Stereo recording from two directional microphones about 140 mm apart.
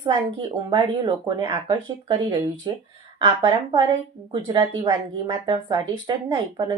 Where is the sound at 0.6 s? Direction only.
30° right (ahead or behind).